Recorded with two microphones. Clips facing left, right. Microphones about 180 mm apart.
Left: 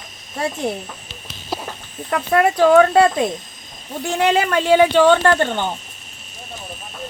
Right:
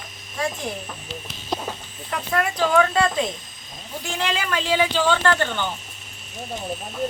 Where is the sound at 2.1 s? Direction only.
55° left (ahead or behind).